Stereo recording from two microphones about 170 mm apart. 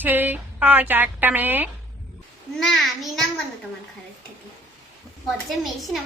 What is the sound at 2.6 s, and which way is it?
Speech, centre (ahead or behind).